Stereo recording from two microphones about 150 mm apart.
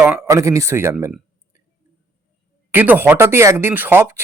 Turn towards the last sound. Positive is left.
turn(degrees=-15)  # may be behind; listen again after turning